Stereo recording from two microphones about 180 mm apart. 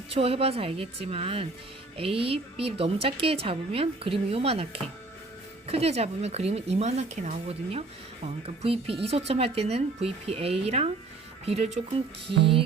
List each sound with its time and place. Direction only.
0.1 s speech: 35° right (ahead or behind)